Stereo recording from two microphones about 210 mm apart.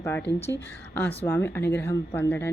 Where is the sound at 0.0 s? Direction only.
10° left (ahead or behind).